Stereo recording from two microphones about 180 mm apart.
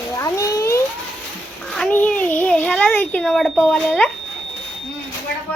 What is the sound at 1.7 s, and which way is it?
A child's voice, 5° left (ahead or behind).